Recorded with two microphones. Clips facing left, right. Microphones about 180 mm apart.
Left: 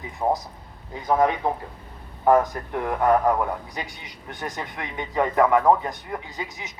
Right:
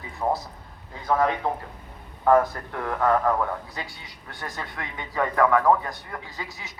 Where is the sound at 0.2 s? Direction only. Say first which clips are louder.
Left 2 dB; 10° left (ahead or behind).